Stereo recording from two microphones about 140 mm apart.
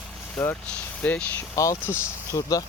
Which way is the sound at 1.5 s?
25° left (ahead or behind).